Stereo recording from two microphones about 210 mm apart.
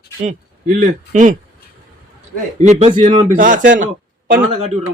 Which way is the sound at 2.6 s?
30° right (ahead or behind).